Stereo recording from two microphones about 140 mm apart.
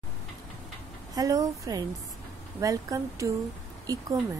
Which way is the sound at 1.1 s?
25° right (ahead or behind).